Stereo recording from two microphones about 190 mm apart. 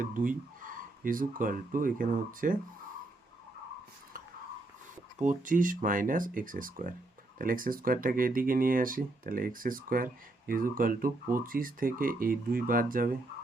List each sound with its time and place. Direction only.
0.0 s speech: 45° right (ahead or behind)
5.2 s speech: 45° right (ahead or behind)